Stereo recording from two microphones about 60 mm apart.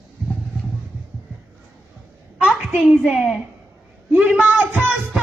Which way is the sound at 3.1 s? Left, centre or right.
Centre.